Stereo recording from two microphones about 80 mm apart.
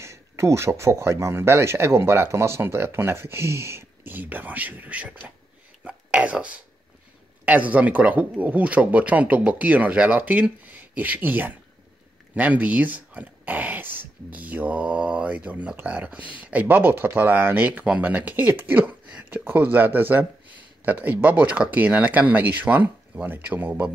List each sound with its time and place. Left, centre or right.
0.0 s speech: right; by 5.2 s centre
5.9 s a sound: centre
7.4 s speech: centre